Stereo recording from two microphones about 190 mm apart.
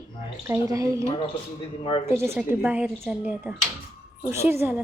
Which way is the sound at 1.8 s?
30° left (ahead or behind).